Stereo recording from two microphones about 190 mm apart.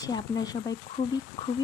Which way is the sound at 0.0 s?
20° left (ahead or behind).